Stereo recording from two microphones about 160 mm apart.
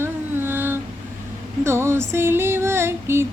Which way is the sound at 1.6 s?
15° right (ahead or behind).